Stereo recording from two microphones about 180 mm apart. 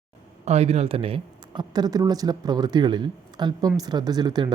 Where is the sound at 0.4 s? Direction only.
35° right (ahead or behind).